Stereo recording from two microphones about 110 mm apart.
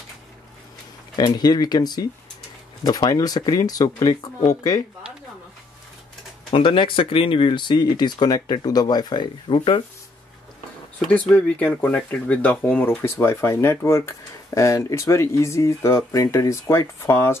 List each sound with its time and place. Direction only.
1.1 s speech: 40° left (ahead or behind)
6.5 s speech: 55° left (ahead or behind)
11.1 s speech: 15° left (ahead or behind)